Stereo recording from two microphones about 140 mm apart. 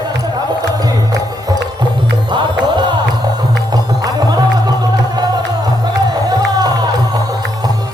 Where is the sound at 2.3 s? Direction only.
35° right (ahead or behind).